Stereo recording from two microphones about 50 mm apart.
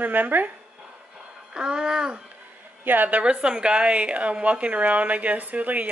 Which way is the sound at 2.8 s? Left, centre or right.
Right.